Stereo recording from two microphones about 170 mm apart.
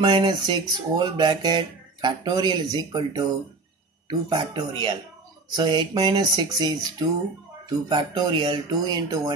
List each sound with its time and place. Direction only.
0.0 s speech: 25° right (ahead or behind)